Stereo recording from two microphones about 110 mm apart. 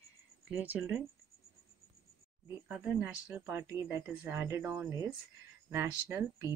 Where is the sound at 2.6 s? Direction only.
5° right (ahead or behind).